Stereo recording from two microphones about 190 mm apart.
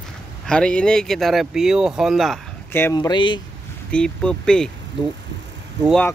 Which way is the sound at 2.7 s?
10° left (ahead or behind).